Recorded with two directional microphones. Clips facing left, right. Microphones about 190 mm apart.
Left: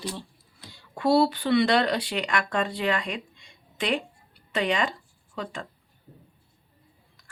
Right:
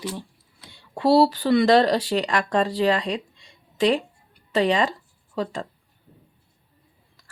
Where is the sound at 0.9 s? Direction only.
35° right (ahead or behind).